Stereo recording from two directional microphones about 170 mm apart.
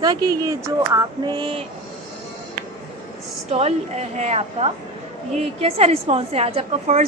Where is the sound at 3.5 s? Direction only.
40° right (ahead or behind).